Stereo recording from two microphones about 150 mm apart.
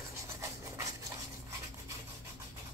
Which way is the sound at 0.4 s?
20° right (ahead or behind).